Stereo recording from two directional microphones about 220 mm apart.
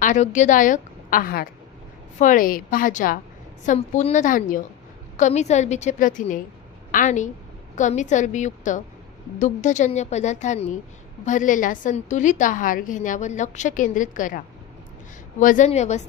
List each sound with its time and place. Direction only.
0.0 s a woman's voice: 35° left (ahead or behind)